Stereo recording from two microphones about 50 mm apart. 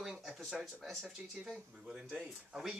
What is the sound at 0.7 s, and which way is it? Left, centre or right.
Speech, centre.